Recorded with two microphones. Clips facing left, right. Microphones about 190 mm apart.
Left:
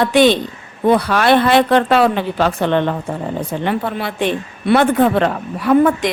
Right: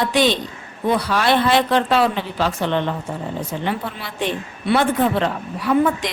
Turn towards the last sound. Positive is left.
turn(degrees=55)  # may be behind; listen again after turning